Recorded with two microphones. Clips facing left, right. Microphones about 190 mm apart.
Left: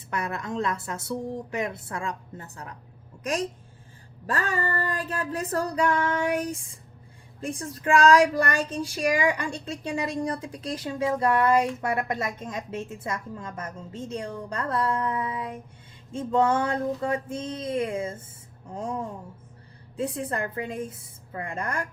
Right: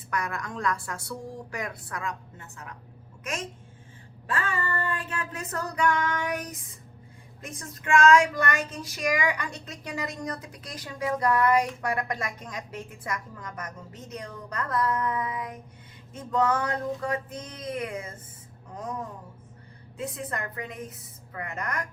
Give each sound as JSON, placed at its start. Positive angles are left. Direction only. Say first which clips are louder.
{"t": 0.1, "sound": "a woman's voice", "louder": "left 2 dB", "side_deg": 25}